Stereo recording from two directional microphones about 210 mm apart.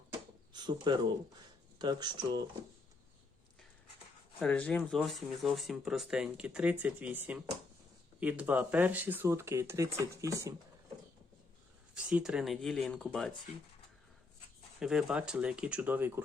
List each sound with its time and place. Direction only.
0.1 s a sound: 20° right (ahead or behind)
1.8 s speech: 20° right (ahead or behind)
4.4 s speech: 5° left (ahead or behind); by 10.5 s 15° right (ahead or behind)
11.9 s speech: 5° right (ahead or behind)
14.8 s speech: 5° right (ahead or behind)